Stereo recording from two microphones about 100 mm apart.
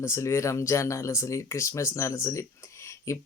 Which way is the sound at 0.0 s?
30° left (ahead or behind).